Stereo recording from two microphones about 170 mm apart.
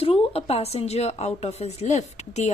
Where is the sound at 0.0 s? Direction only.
35° left (ahead or behind).